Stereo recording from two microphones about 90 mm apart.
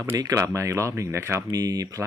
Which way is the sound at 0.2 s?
40° right (ahead or behind).